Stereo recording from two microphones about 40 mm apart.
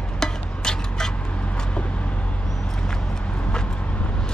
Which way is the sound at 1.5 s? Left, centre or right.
Left.